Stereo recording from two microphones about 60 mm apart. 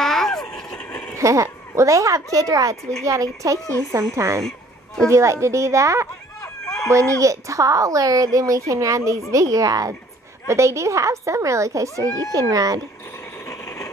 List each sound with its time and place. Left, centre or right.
0.0 s vehicle: centre
1.1 s speech: right
4.4 s a sound: centre
5.0 s speech: right
10.4 s speech: right
12.0 s speech: right
13.5 s ratchet: left